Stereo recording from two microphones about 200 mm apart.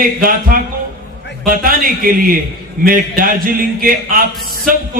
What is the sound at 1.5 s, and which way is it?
A man's voice, 45° right (ahead or behind).